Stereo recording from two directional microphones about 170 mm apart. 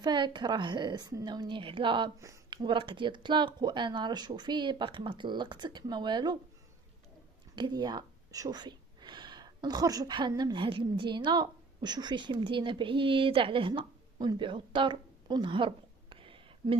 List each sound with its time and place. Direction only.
0.0 s speech: 25° right (ahead or behind)
2.1 s speech: 20° right (ahead or behind)
7.5 s speech: 25° right (ahead or behind)